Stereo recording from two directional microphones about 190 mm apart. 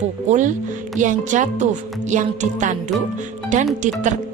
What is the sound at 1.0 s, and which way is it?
Speech, 40° right (ahead or behind).